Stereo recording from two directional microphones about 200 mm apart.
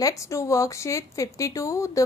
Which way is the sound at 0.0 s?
15° left (ahead or behind).